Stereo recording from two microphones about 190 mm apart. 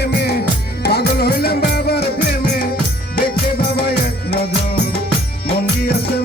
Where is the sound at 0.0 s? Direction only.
55° left (ahead or behind).